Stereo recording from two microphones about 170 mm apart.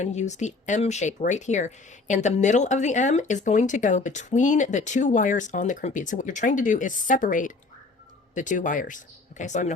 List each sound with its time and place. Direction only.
0.0 s speech: 45° left (ahead or behind)